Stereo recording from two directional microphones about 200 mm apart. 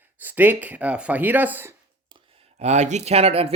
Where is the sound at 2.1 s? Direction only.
30° right (ahead or behind).